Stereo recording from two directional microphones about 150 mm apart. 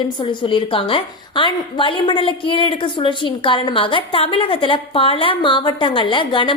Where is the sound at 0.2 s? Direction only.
35° left (ahead or behind).